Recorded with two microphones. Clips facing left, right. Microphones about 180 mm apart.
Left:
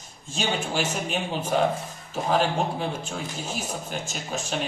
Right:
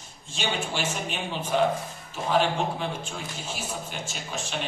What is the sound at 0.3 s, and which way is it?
Speech, 40° left (ahead or behind).